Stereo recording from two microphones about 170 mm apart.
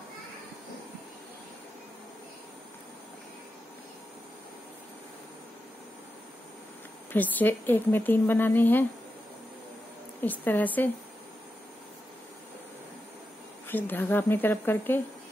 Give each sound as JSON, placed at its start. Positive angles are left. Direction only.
{"t": 7.1, "sound": "speech", "side_deg": 10}
{"t": 10.2, "sound": "speech", "side_deg": 10}
{"t": 13.7, "sound": "speech", "side_deg": 10}